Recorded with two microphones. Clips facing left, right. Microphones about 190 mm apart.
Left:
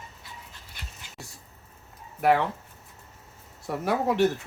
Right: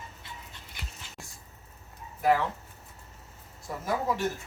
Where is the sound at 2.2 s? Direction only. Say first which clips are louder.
Left 3 dB; 70° left (ahead or behind).